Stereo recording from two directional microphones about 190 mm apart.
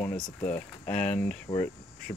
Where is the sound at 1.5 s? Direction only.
20° left (ahead or behind).